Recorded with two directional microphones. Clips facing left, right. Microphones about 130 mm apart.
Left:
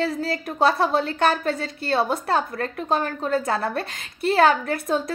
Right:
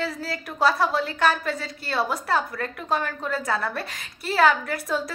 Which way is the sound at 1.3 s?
55° left (ahead or behind).